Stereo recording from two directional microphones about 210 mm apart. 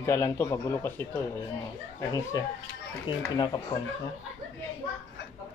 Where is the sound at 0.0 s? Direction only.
10° left (ahead or behind).